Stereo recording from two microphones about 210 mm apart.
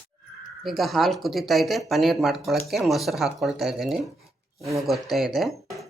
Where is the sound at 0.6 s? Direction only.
Centre (ahead or behind).